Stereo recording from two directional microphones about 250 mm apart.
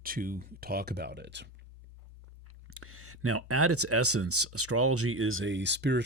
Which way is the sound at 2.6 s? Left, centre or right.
Right.